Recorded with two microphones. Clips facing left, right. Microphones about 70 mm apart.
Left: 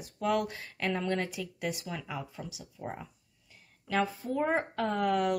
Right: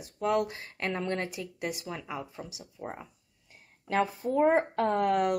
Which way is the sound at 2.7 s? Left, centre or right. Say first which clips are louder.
Right 1 dB; centre.